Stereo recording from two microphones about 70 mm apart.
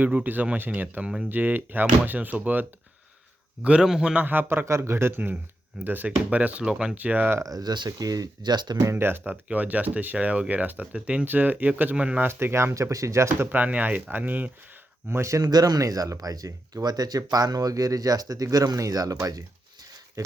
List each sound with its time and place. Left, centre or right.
0.0 s speech: right; by 4.1 s centre
4.1 s speech: right
4.6 s speech: right; by 6.9 s centre
6.9 s speech: right
7.4 s speech: right
8.9 s speech: right
12.3 s speech: right
12.7 s speech: right
13.5 s speech: right
15.1 s speech: right
15.4 s speech: right